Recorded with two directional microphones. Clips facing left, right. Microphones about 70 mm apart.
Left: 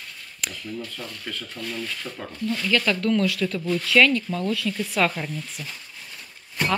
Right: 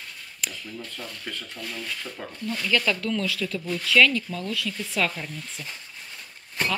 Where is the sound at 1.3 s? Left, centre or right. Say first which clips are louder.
Left 2 dB; right.